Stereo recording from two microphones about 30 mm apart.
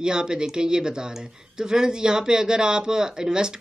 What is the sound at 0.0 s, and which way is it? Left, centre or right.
Speech, right.